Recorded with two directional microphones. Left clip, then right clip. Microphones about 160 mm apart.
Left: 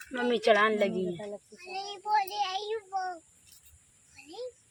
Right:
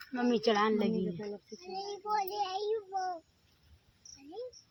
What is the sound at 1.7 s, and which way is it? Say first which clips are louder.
A child's voice: left 5 dB; 40° right (ahead or behind).